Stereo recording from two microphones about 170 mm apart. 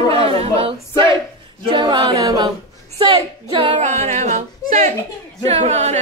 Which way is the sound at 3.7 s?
45° right (ahead or behind).